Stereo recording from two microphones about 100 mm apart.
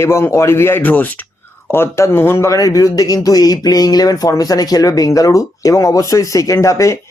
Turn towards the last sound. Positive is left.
turn(degrees=30)  # may be behind; listen again after turning